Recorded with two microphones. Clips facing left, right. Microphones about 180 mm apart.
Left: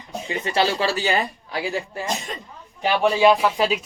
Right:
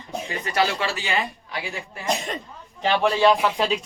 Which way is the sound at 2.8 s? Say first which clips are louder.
Left 2 dB; 10° left (ahead or behind).